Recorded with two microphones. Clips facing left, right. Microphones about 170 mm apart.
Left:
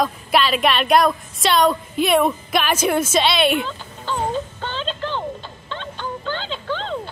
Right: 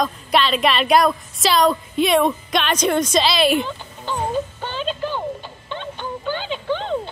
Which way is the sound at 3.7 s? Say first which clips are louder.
Even; 15° right (ahead or behind).